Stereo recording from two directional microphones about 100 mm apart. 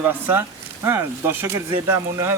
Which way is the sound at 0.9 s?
25° right (ahead or behind).